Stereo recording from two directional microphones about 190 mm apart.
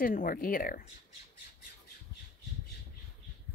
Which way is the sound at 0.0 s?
45° left (ahead or behind).